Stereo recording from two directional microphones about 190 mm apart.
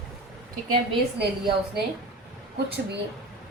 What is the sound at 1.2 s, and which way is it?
Speech, 60° right (ahead or behind).